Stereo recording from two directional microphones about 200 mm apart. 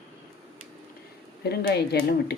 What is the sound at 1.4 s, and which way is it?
Speech, 55° left (ahead or behind).